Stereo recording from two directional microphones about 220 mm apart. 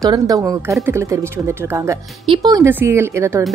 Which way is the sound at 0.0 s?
15° right (ahead or behind).